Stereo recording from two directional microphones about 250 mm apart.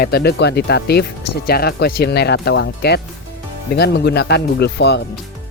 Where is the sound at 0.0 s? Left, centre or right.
Left.